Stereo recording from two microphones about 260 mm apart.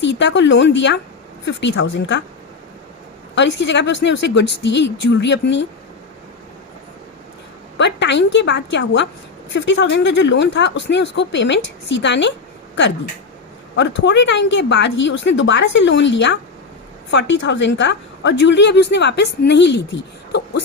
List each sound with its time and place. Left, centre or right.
0.0 s speech: left
3.3 s speech: left
7.8 s speech: left
13.7 s a woman's voice: left